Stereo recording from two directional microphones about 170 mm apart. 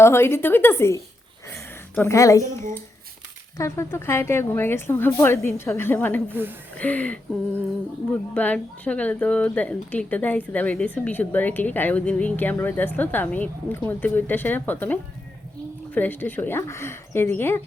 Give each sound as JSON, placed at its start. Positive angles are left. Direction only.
{"t": 0.0, "sound": "speech", "side_deg": 15}
{"t": 1.5, "sound": "a sound", "side_deg": 15}
{"t": 3.6, "sound": "speech", "side_deg": 15}
{"t": 6.3, "sound": "speech", "side_deg": -10}
{"t": 6.7, "sound": "speech", "side_deg": 10}
{"t": 8.3, "sound": "speech", "side_deg": 5}
{"t": 16.0, "sound": "speech", "side_deg": 10}